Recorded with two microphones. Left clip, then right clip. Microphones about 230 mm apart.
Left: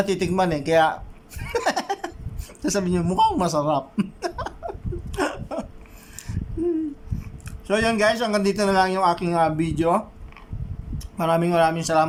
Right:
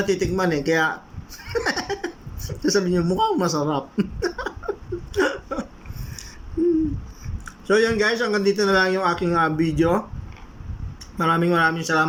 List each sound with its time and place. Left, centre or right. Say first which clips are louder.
0.0 s speech: even; left
1.5 s a sound: left 1 dB; left
2.6 s speech: right 3 dB; left
5.1 s hiccup: right 3 dB; left
7.4 s speech: right 3 dB; left